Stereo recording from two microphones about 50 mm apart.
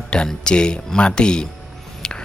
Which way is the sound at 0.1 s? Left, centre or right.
Centre.